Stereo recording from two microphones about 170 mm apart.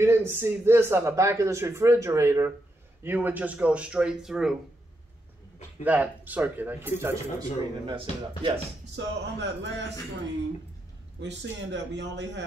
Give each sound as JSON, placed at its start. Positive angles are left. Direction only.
{"t": 0.0, "sound": "a man's voice", "side_deg": -15}
{"t": 5.9, "sound": "a man's voice", "side_deg": -10}
{"t": 7.8, "sound": "speech", "side_deg": -30}
{"t": 8.9, "sound": "a man's voice", "side_deg": -90}
{"t": 11.1, "sound": "a man's voice", "side_deg": -90}